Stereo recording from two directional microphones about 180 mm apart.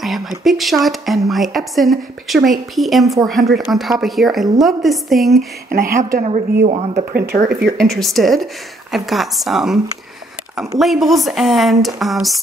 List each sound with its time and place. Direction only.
0.0 s a woman's voice: centre (ahead or behind)
5.7 s a woman's voice: 55° right (ahead or behind)
6.1 s speech: 40° right (ahead or behind)
7.1 s speech: 60° right (ahead or behind)
7.7 s a woman's voice: centre (ahead or behind)
10.8 s a woman's voice: centre (ahead or behind)